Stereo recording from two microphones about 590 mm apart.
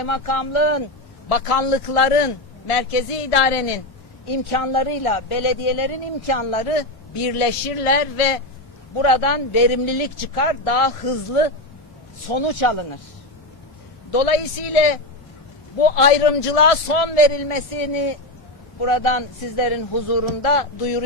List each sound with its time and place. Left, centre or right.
0.0 s speech: left
9.0 s speech: left
12.3 s a man's voice: left
14.1 s speech: left
15.8 s a man's voice: left